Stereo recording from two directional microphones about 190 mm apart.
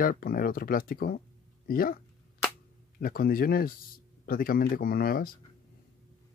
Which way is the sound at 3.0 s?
50° left (ahead or behind).